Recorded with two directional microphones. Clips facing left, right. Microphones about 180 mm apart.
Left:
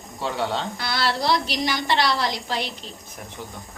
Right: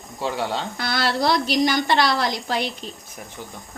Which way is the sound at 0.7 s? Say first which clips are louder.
Right 2 dB; 50° right (ahead or behind).